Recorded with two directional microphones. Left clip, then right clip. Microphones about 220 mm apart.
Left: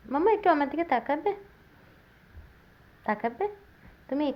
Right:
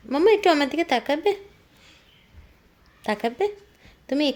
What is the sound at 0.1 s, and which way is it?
Speech, 35° right (ahead or behind).